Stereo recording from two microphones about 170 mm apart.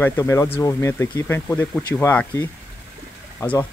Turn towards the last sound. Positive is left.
turn(degrees=15)  # may be behind; listen again after turning